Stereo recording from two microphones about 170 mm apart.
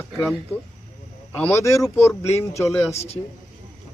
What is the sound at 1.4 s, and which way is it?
Speech, 20° left (ahead or behind).